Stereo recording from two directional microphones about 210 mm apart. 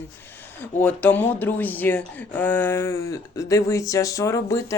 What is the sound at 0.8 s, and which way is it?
Speech, 5° left (ahead or behind).